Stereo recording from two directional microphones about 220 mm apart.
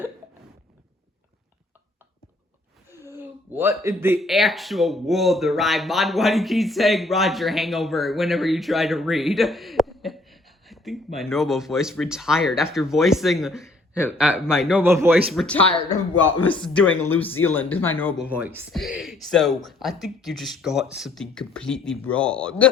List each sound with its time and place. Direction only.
3.1 s speech: 10° right (ahead or behind); by 18.1 s 10° left (ahead or behind)
18.2 s speech: 5° right (ahead or behind)